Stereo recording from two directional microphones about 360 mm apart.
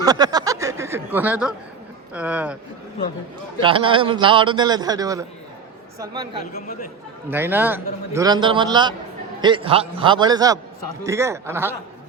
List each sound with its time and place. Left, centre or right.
0.0 s a sound: centre
2.1 s speech: centre
3.6 s a man's voice: centre
6.5 s speech: centre
7.3 s a man's voice: centre